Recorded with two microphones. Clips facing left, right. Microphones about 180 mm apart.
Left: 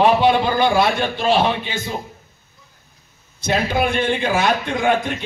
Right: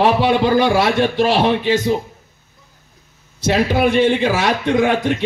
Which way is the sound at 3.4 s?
90° right.